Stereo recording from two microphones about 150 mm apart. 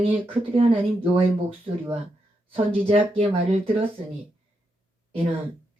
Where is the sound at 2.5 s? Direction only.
35° right (ahead or behind).